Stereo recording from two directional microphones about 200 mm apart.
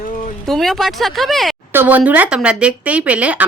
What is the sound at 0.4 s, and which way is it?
Speech, centre (ahead or behind).